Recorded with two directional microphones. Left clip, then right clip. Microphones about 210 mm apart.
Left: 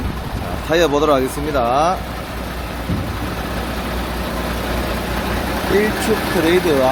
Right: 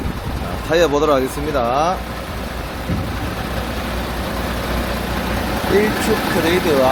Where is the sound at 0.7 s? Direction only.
5° left (ahead or behind).